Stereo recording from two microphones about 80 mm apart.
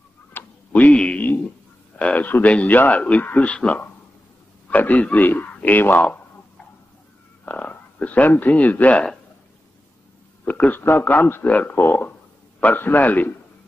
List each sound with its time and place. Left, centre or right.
0.3 s a sound: left
2.0 s a man's voice: centre
7.4 s speech: centre
10.4 s a man's voice: left